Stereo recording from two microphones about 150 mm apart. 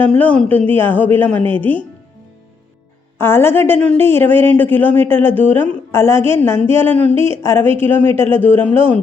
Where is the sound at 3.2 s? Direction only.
15° left (ahead or behind).